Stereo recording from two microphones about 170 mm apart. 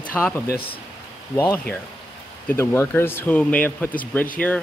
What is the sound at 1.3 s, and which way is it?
Speech, 15° left (ahead or behind).